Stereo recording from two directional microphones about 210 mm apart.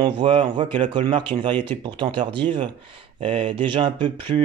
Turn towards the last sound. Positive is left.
turn(degrees=-20)  # may be behind; listen again after turning